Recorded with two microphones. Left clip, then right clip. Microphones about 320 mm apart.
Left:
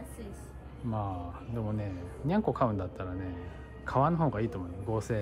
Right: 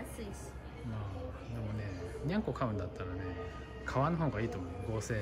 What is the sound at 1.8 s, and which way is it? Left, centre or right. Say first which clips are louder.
Speech: left 2 dB; centre.